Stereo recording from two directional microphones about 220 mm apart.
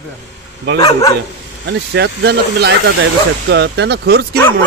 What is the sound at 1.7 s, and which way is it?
Speech, 50° right (ahead or behind).